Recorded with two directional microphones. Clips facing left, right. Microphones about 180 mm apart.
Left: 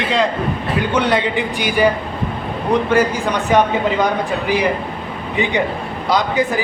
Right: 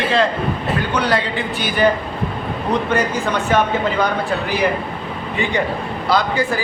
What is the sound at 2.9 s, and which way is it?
Speech, 15° left (ahead or behind).